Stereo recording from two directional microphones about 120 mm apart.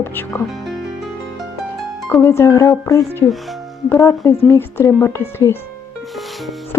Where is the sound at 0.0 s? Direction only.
20° left (ahead or behind).